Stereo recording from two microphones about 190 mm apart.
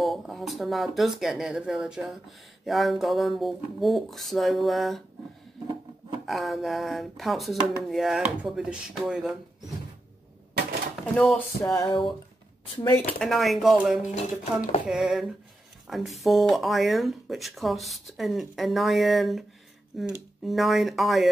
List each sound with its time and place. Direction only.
0.0 s speech: centre (ahead or behind)
6.2 s speech: centre (ahead or behind)
11.1 s speech: 5° left (ahead or behind)
11.7 s a sound: 20° left (ahead or behind)
13.2 s speech: centre (ahead or behind)
14.1 s speech: 35° left (ahead or behind)
14.9 s speech: 5° right (ahead or behind)